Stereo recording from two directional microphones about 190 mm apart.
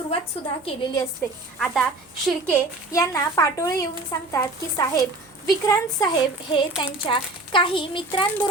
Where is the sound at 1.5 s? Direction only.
Centre (ahead or behind).